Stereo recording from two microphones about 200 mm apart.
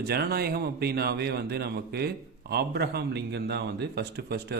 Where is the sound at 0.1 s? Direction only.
50° right (ahead or behind).